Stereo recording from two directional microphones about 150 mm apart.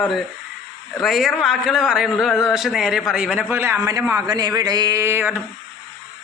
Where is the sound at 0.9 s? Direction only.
Centre (ahead or behind).